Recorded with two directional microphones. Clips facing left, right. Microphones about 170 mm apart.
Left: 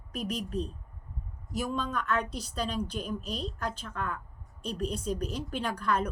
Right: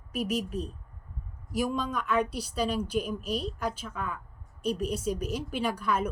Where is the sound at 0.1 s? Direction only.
10° right (ahead or behind).